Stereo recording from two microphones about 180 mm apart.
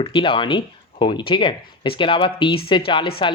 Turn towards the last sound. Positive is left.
turn(degrees=30)  # may be behind; listen again after turning